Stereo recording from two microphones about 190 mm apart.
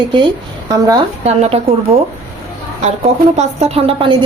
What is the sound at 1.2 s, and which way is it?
Speech, 35° right (ahead or behind).